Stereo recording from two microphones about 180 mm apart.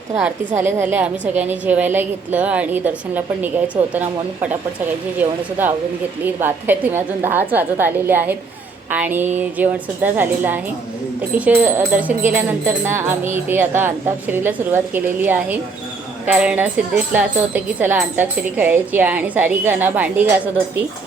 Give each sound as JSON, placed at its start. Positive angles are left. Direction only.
{"t": 0.2, "sound": "speech", "side_deg": -10}
{"t": 5.1, "sound": "speech", "side_deg": -10}